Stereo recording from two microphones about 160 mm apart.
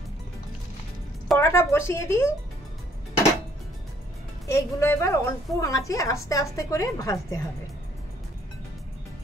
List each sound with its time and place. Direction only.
1.4 s a woman's voice: 15° left (ahead or behind)
4.5 s a woman's voice: 15° left (ahead or behind)